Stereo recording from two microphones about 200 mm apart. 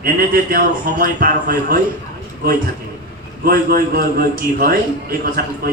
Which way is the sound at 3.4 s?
50° right (ahead or behind).